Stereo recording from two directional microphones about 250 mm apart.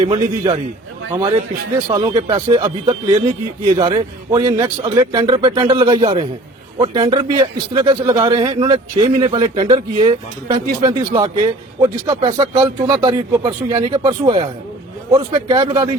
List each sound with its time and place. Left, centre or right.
0.0 s a man's voice: centre
1.9 s a man's voice: centre